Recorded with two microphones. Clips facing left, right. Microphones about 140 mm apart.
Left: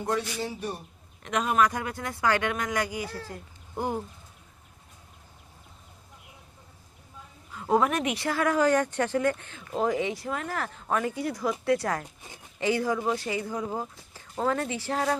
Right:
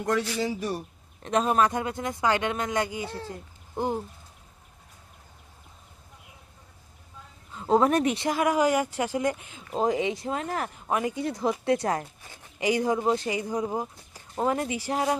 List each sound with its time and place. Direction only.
0.0 s a man's voice: 90° right
1.2 s speech: 35° right (ahead or behind)
7.5 s a sound: 25° right (ahead or behind)
7.9 s speech: 35° right (ahead or behind)
8.2 s speech: 15° right (ahead or behind)